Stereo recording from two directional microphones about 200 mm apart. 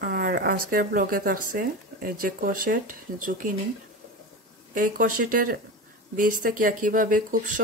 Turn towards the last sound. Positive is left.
turn(degrees=-40)  # may be behind; listen again after turning